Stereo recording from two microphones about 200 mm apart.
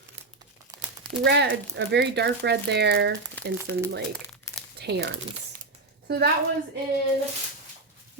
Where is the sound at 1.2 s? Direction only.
60° right (ahead or behind).